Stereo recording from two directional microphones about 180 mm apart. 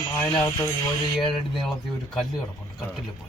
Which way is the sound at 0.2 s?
20° left (ahead or behind).